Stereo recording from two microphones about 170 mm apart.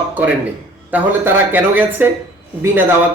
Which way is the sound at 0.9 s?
10° right (ahead or behind).